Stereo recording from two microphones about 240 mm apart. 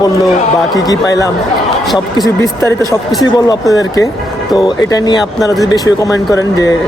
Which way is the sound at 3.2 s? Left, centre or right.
Centre.